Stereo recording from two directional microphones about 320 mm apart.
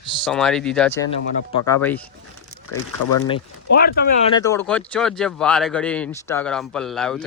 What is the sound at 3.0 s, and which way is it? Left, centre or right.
Speech, left.